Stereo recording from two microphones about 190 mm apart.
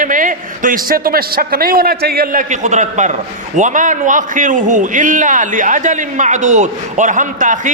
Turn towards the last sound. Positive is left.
turn(degrees=-40)  # may be behind; listen again after turning